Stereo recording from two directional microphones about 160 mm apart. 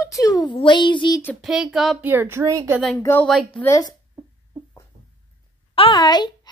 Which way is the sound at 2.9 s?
20° left (ahead or behind).